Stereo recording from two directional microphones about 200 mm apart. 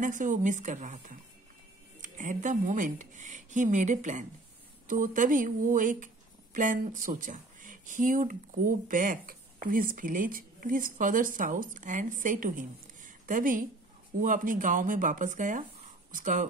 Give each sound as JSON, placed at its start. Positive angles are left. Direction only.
{"t": 0.0, "sound": "speech", "side_deg": -40}